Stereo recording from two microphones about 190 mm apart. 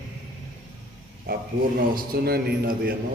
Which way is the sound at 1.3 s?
50° right (ahead or behind).